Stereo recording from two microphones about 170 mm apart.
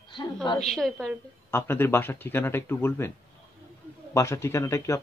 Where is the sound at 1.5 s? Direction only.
15° left (ahead or behind).